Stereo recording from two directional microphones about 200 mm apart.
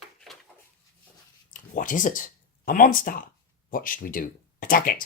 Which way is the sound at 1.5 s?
40° left (ahead or behind).